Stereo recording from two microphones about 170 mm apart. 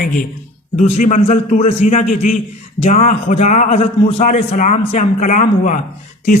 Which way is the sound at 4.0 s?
35° left (ahead or behind).